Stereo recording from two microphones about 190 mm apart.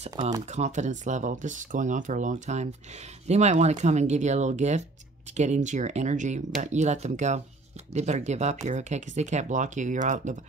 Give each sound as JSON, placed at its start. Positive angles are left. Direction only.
{"t": 0.1, "sound": "speech", "side_deg": -20}
{"t": 0.5, "sound": "speech", "side_deg": -40}